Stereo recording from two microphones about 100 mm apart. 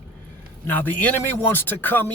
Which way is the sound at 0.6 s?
20° left (ahead or behind).